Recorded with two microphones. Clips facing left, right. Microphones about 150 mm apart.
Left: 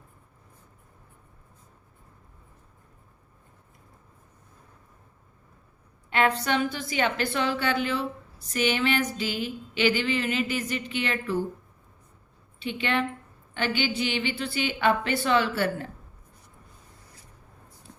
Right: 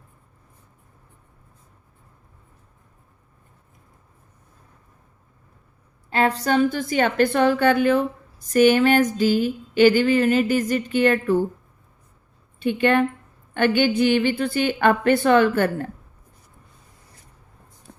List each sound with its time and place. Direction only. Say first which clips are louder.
6.1 s a woman's voice: right 4 dB; 35° right (ahead or behind)
12.5 s a woman's voice: right 9 dB; 50° right (ahead or behind)